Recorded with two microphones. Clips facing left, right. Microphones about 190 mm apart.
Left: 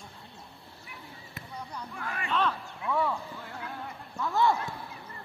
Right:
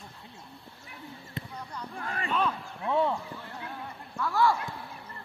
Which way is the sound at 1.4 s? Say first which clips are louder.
Right 7 dB; 30° right (ahead or behind).